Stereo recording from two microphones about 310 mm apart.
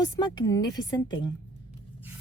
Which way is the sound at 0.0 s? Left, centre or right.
Centre.